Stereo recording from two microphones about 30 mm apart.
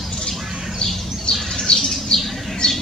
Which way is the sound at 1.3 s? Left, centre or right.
Centre.